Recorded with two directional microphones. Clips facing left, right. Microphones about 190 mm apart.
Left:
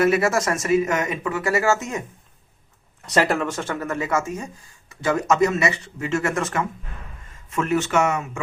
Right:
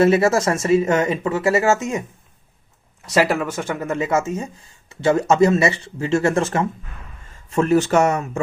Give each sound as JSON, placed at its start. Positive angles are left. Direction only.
{"t": 0.0, "sound": "speech", "side_deg": -25}
{"t": 3.1, "sound": "speech", "side_deg": -5}